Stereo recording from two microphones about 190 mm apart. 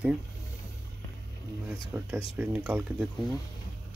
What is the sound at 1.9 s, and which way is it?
Speech, 15° right (ahead or behind).